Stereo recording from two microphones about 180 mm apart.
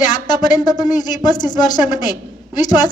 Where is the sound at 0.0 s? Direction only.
25° left (ahead or behind).